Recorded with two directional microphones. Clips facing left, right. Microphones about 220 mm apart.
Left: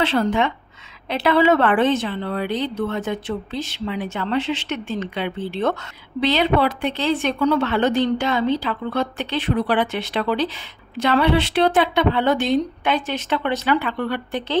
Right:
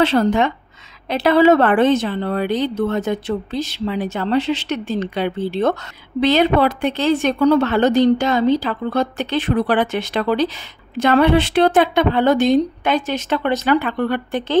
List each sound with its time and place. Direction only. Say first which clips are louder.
0.0 s a woman's voice: right 4 dB; 40° right (ahead or behind)